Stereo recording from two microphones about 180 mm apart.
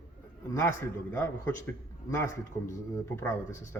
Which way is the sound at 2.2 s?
15° left (ahead or behind).